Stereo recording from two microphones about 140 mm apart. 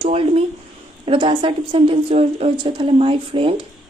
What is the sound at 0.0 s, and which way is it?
A woman's voice, 45° right (ahead or behind).